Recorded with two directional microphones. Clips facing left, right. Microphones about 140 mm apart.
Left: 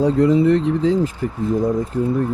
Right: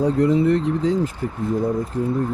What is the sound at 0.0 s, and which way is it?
Speech, 90° left.